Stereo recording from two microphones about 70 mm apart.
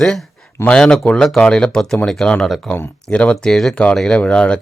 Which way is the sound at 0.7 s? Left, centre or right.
Centre.